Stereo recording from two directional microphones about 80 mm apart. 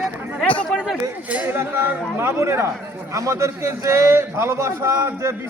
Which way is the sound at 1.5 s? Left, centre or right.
Right.